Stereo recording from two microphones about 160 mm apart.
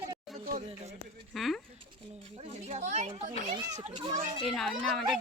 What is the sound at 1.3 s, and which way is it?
Speech, centre (ahead or behind).